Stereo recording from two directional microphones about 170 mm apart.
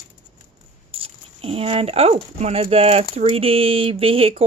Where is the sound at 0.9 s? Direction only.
35° right (ahead or behind).